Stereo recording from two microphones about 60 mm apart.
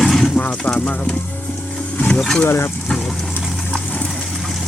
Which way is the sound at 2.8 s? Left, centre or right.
Centre.